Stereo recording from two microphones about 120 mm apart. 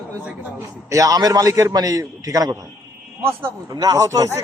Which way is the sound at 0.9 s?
30° right (ahead or behind).